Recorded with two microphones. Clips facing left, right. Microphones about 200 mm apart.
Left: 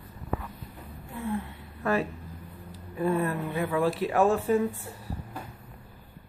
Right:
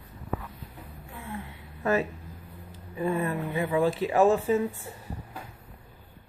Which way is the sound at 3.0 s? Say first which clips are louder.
Left 1 dB; centre (ahead or behind).